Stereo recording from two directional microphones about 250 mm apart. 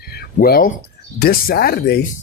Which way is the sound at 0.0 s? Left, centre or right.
Left.